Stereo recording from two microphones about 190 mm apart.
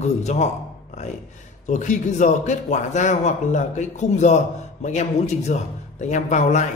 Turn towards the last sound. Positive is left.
turn(degrees=40)  # may be behind; listen again after turning